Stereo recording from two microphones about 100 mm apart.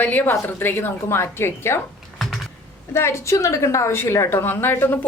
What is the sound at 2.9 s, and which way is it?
A woman's voice, 25° left (ahead or behind).